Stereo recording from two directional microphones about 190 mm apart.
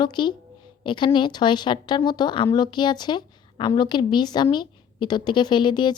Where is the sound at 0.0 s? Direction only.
25° left (ahead or behind).